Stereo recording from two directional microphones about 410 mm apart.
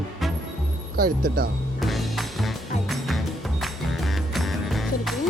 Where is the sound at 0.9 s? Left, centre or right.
Right.